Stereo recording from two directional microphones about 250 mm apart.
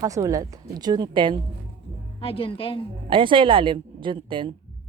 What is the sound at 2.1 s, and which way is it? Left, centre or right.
Speech, left.